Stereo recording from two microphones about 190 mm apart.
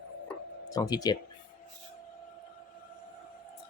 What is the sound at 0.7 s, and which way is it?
Speech, 20° left (ahead or behind).